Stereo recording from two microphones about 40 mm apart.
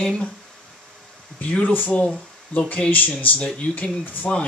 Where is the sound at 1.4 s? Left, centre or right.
Left.